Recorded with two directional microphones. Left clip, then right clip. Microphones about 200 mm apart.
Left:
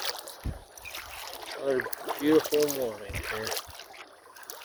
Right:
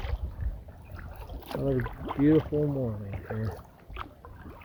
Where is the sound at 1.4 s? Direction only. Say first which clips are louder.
Left 1 dB; 45° right (ahead or behind).